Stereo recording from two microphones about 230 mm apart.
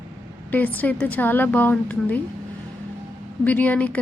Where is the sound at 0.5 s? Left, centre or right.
Centre.